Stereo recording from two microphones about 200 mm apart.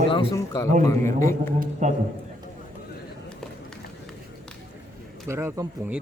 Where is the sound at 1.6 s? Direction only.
40° right (ahead or behind).